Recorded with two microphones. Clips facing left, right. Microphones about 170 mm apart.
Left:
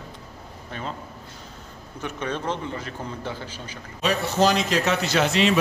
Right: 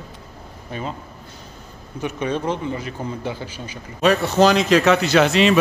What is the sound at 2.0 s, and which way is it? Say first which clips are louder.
A man's voice: right 6 dB; 15° right (ahead or behind).